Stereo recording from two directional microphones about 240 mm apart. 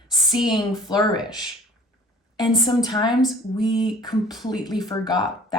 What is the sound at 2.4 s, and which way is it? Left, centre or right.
A woman's voice, centre.